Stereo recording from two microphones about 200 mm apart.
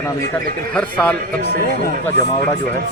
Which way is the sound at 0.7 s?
5° left (ahead or behind).